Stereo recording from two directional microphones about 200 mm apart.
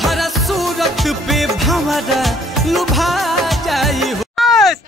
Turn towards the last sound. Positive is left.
turn(degrees=0)  # may be behind; listen again after turning